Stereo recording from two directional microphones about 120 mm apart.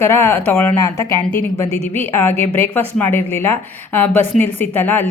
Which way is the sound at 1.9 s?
20° left (ahead or behind).